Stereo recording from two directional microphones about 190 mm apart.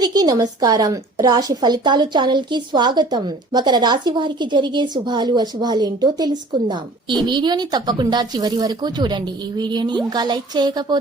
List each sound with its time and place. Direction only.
0.0 s a woman's voice: 20° right (ahead or behind)